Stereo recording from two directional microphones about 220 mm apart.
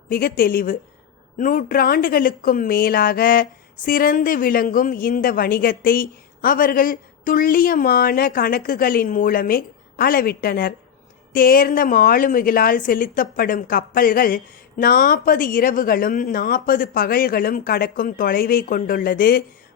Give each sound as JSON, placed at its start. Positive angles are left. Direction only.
{"t": 0.1, "sound": "a woman's voice", "side_deg": 40}